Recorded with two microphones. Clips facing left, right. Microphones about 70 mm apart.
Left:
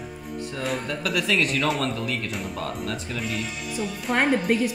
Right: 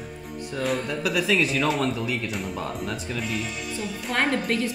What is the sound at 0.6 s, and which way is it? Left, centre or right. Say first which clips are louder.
Speech: right 3 dB; centre.